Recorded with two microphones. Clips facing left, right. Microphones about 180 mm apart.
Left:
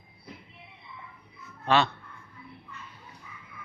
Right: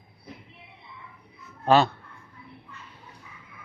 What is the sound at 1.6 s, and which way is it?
Speech, 35° right (ahead or behind).